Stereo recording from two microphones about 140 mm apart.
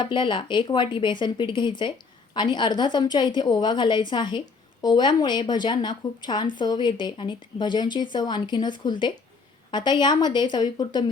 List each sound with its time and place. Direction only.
0.0 s a woman's voice: 35° left (ahead or behind)